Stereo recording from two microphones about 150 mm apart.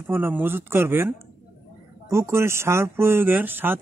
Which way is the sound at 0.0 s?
15° right (ahead or behind).